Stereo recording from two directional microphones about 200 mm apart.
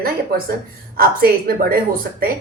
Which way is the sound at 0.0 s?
50° right (ahead or behind).